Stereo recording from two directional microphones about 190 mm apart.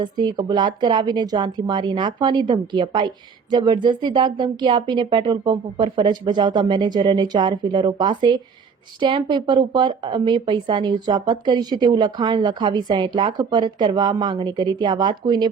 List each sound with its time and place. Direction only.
0.0 s a woman's voice: 20° right (ahead or behind)